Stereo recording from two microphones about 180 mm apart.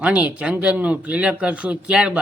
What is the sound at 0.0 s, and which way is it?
Speech, 5° right (ahead or behind).